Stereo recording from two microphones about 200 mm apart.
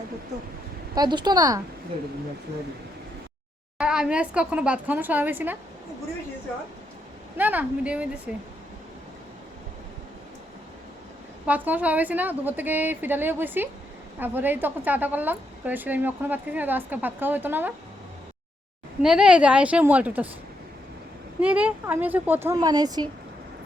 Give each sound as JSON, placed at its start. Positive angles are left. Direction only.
{"t": 0.9, "sound": "a woman's voice", "side_deg": -20}
{"t": 3.8, "sound": "a woman's voice", "side_deg": -5}
{"t": 7.3, "sound": "a woman's voice", "side_deg": -10}
{"t": 11.4, "sound": "a woman's voice", "side_deg": -10}
{"t": 19.0, "sound": "a woman's voice", "side_deg": -5}
{"t": 21.4, "sound": "a woman's voice", "side_deg": -5}